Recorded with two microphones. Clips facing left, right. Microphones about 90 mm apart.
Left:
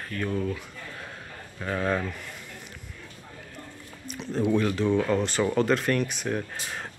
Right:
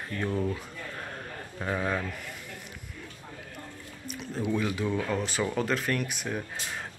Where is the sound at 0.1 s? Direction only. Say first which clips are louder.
Left 1 dB; 20° right (ahead or behind).